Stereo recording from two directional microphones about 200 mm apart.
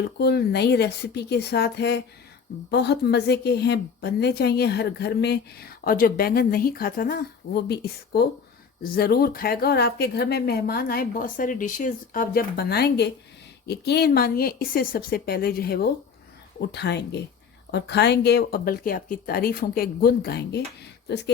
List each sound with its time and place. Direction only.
0.2 s a woman's voice: 55° left (ahead or behind)